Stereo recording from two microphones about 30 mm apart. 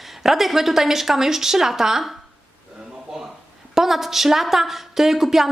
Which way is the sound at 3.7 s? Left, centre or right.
Centre.